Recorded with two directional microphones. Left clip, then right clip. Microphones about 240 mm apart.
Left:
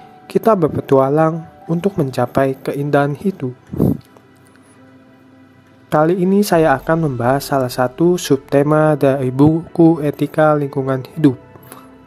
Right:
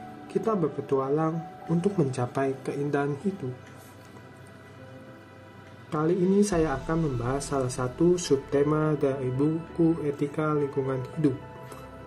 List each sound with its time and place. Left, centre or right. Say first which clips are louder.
0.3 s speech: left 13 dB; left
5.9 s speech: left 12 dB; left